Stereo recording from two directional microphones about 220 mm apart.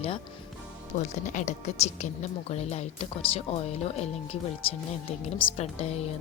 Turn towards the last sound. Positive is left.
turn(degrees=30)  # may be behind; listen again after turning